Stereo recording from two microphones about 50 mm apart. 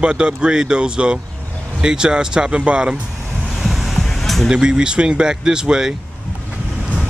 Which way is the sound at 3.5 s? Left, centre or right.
Centre.